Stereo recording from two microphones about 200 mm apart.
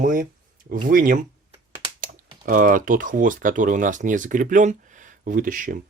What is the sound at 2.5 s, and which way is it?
Speech, 40° right (ahead or behind).